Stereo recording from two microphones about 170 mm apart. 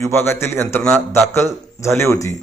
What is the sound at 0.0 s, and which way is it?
A man's voice, 15° left (ahead or behind).